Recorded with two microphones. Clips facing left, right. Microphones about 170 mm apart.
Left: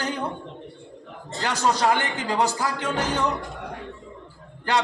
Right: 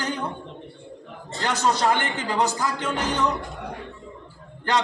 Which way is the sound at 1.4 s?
10° left (ahead or behind).